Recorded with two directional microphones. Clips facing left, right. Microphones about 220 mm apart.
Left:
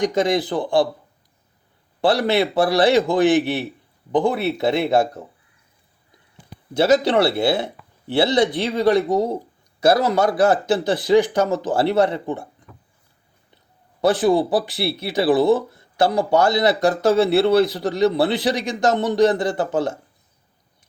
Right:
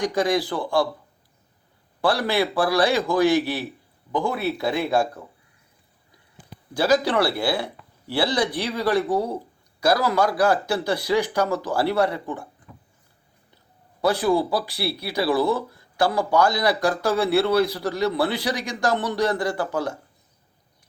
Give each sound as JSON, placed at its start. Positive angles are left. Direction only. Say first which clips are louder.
{"t": 0.0, "sound": "speech", "louder": "left 3 dB", "side_deg": 20}
{"t": 2.0, "sound": "speech", "louder": "left 4 dB", "side_deg": 20}
{"t": 6.7, "sound": "speech", "louder": "left 4 dB", "side_deg": 25}
{"t": 14.0, "sound": "speech", "louder": "left 4 dB", "side_deg": 20}